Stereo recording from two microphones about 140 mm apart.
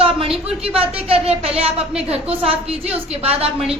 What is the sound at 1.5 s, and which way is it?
A woman's voice, 45° right (ahead or behind).